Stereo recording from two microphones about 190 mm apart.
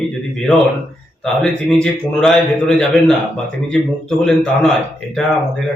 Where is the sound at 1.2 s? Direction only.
5° left (ahead or behind).